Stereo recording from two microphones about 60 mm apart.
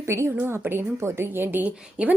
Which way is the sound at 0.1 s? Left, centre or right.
Right.